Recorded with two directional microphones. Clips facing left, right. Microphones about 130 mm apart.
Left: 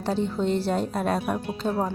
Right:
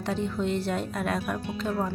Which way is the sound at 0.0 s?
30° left (ahead or behind).